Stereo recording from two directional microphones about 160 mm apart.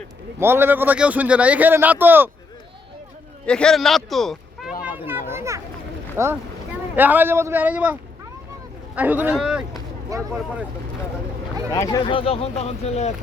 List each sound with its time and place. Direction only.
0.3 s speech: 15° right (ahead or behind)
3.4 s a man's voice: 5° left (ahead or behind)
4.8 s a sound: 10° right (ahead or behind)
6.2 s speech: 15° right (ahead or behind)
9.0 s speech: 10° right (ahead or behind)
10.1 s speech: 20° right (ahead or behind)
11.7 s speech: 25° left (ahead or behind); by 13.1 s 45° left (ahead or behind)